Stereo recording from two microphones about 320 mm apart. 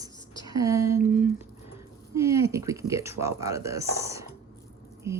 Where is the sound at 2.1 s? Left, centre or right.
Centre.